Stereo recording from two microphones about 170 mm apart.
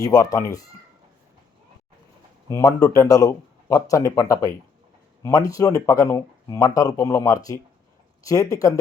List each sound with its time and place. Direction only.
0.0 s speech: 20° left (ahead or behind)
2.5 s speech: 20° left (ahead or behind)